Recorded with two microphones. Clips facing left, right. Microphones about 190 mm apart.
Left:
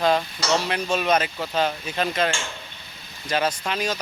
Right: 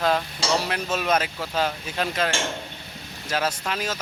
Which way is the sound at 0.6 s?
5° right (ahead or behind).